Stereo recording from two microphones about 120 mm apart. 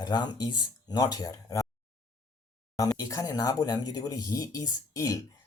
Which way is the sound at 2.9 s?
30° left (ahead or behind).